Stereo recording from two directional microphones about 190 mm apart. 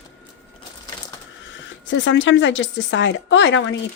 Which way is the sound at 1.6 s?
75° left (ahead or behind).